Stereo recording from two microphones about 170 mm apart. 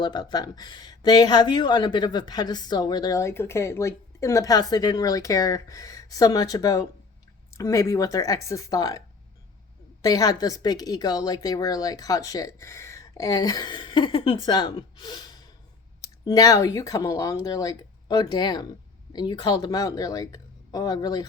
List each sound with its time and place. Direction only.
0.0 s speech: 25° left (ahead or behind)
10.0 s speech: 20° left (ahead or behind)